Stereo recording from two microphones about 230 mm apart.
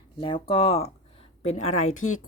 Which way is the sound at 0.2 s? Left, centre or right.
Left.